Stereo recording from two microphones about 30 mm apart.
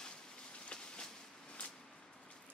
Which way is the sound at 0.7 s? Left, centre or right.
Left.